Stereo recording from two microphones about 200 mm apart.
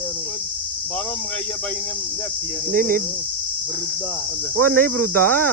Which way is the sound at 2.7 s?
45° right (ahead or behind).